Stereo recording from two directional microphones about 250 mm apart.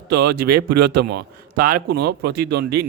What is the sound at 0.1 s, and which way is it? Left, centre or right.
Speech, right.